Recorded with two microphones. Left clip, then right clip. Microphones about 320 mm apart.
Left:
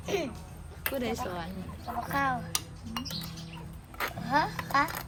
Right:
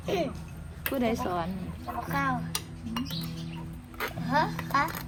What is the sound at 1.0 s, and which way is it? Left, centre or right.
Speech, centre.